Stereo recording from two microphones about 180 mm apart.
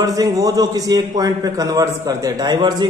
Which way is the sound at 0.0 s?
20° right (ahead or behind).